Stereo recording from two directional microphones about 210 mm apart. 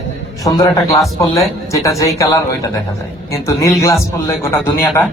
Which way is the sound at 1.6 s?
15° left (ahead or behind).